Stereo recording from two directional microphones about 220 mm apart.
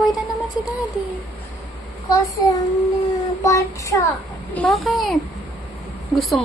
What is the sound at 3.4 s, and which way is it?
Child singing, 15° left (ahead or behind).